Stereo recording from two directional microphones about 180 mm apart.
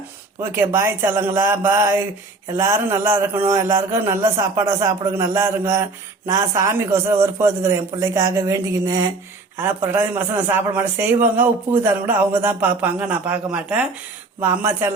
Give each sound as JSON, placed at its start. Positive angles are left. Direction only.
{"t": 0.5, "sound": "a man's voice", "side_deg": -15}